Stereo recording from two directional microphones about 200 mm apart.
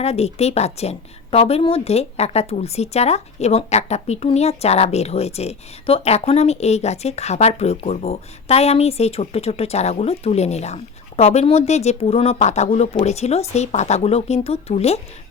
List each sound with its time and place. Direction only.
0.0 s a woman's voice: 30° left (ahead or behind)